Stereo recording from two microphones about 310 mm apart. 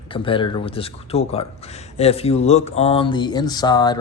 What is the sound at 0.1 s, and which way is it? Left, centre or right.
Speech, centre.